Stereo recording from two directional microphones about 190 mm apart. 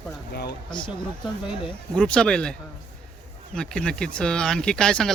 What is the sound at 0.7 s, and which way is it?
Speech, 25° left (ahead or behind).